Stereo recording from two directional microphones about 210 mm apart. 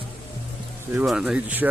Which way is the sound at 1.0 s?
5° right (ahead or behind).